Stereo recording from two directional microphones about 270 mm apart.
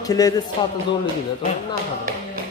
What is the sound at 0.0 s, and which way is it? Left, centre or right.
Speech, centre.